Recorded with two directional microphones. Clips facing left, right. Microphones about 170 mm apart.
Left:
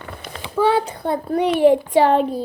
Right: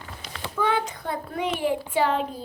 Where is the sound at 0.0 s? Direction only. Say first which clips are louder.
Left 6 dB; 60° left (ahead or behind).